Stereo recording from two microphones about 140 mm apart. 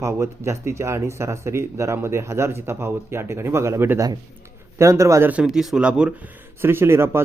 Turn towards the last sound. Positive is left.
turn(degrees=-15)  # may be behind; listen again after turning